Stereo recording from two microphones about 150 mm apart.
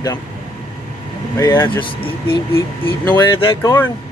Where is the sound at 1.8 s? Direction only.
35° left (ahead or behind).